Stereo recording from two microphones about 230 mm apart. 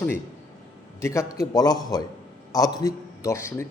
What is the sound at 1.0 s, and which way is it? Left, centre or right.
A man's voice, centre.